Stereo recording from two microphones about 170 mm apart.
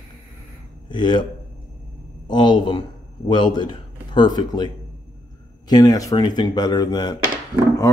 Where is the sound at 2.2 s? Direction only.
25° left (ahead or behind).